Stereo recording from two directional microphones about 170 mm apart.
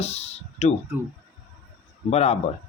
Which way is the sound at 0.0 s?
40° left (ahead or behind).